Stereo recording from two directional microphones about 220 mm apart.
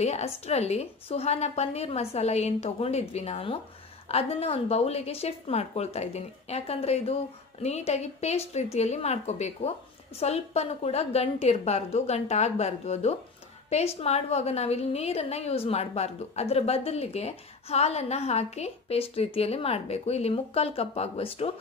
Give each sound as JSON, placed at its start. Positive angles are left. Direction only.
{"t": 0.0, "sound": "a woman's voice", "side_deg": 30}